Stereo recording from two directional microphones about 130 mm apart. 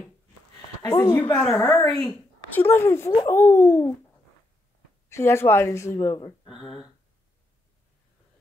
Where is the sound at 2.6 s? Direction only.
20° left (ahead or behind).